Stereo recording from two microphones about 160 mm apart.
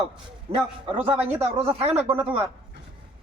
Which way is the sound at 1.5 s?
40° right (ahead or behind).